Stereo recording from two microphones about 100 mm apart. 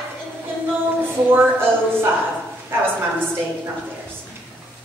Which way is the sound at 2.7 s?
20° right (ahead or behind).